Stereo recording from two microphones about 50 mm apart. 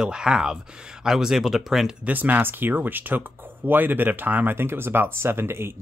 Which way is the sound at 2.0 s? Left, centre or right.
Right.